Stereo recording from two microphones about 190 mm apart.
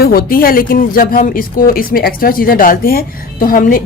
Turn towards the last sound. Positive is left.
turn(degrees=45)  # may be behind; listen again after turning